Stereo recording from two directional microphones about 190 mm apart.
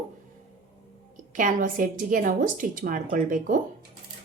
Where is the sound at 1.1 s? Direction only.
45° right (ahead or behind).